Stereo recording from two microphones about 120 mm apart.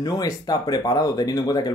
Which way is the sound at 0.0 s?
35° left (ahead or behind).